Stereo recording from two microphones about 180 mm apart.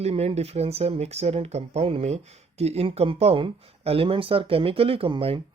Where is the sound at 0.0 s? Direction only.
35° right (ahead or behind).